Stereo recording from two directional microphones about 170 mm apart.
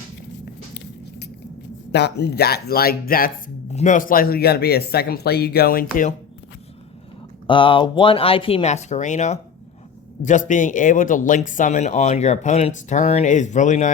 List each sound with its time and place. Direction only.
1.9 s speech: 80° left; by 6.1 s 60° left (ahead or behind)
7.4 s speech: 30° left (ahead or behind); by 13.9 s 45° left (ahead or behind)